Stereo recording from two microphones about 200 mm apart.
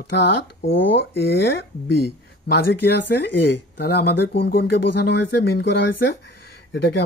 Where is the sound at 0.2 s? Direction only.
60° left (ahead or behind).